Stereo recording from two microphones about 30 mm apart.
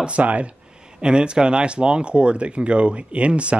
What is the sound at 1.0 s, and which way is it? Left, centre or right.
Speech, right.